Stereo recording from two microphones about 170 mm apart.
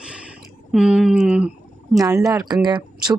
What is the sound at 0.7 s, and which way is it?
Speech, 5° right (ahead or behind).